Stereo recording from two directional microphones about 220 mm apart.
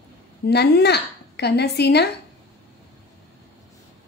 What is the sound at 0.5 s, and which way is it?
Speech, 50° left (ahead or behind).